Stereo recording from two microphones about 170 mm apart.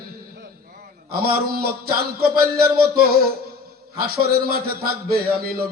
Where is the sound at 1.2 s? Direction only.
60° right (ahead or behind).